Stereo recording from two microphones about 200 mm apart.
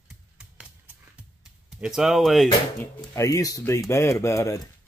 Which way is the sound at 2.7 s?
15° left (ahead or behind).